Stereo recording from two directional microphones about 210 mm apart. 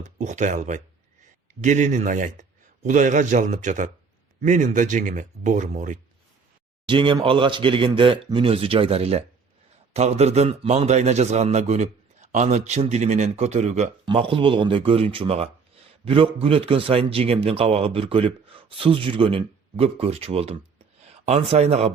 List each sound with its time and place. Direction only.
0.0 s a man's voice: 35° right (ahead or behind)
6.8 s a man's voice: 25° right (ahead or behind)